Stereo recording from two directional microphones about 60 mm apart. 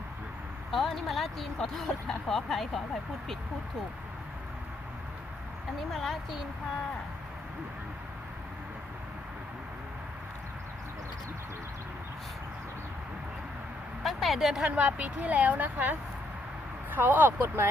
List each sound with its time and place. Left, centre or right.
0.7 s speech: centre
5.9 s speech: centre
14.0 s speech: centre
14.8 s speech: right